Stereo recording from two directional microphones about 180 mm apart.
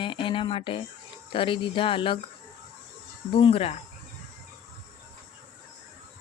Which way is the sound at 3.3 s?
30° left (ahead or behind).